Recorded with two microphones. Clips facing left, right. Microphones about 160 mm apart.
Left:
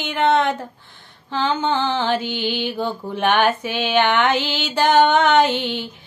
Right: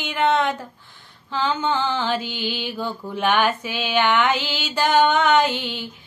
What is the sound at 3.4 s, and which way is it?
Female singing, 60° left (ahead or behind).